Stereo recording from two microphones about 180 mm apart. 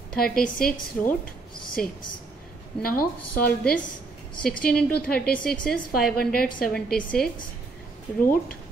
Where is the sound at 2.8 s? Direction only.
55° left (ahead or behind).